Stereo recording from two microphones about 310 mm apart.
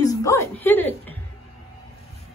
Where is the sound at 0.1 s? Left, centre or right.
Centre.